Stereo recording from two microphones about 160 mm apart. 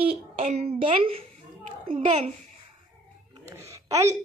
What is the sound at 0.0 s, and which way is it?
A child's voice, 35° right (ahead or behind).